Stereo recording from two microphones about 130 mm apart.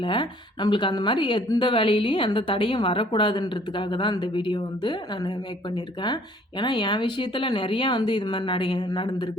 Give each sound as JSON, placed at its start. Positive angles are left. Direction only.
{"t": 0.0, "sound": "a woman's voice", "side_deg": 40}